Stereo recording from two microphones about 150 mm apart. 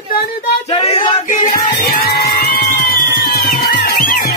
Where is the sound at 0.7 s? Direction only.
45° left (ahead or behind).